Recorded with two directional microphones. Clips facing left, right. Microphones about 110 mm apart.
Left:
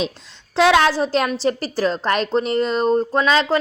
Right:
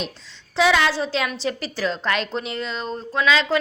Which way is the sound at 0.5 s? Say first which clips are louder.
Left 4 dB; 65° left (ahead or behind).